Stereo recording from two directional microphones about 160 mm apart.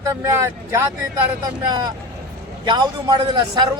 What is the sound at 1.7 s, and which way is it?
A man's voice, 25° right (ahead or behind).